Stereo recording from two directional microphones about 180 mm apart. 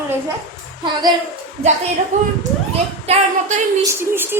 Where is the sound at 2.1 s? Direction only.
40° right (ahead or behind).